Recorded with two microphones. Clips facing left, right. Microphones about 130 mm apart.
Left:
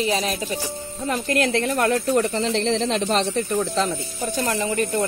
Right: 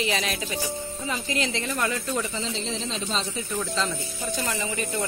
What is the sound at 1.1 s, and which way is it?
Speech, 55° left (ahead or behind).